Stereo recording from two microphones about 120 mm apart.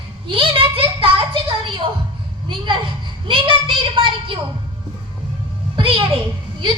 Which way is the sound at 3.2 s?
45° right (ahead or behind).